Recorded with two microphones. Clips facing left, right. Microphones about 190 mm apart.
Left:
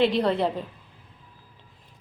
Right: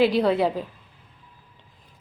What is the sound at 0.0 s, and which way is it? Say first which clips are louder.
Speech: right 2 dB; 5° right (ahead or behind).